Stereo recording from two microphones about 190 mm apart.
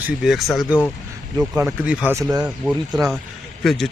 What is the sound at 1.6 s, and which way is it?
Speech, 5° right (ahead or behind).